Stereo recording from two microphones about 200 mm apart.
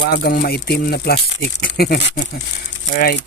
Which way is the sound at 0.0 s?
50° left (ahead or behind).